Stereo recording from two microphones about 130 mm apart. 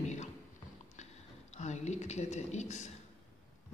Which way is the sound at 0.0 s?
65° left (ahead or behind).